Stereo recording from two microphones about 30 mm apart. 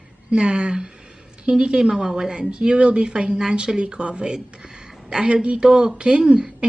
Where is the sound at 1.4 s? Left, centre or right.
Right.